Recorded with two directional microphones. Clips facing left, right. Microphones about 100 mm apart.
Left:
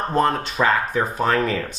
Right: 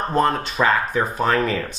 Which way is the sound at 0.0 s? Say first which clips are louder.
Even; 15° right (ahead or behind).